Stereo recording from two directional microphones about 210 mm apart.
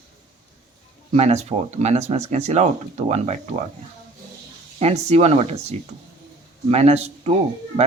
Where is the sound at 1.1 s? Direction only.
30° right (ahead or behind).